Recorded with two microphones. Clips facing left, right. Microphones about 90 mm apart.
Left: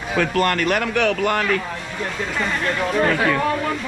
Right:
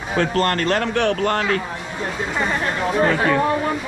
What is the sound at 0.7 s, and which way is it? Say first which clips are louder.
Speech: even; 20° right (ahead or behind).